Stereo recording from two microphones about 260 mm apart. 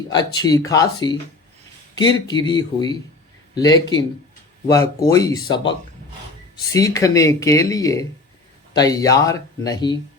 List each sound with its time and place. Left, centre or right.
0.1 s speech: centre
5.0 s speech: centre
6.7 s speech: centre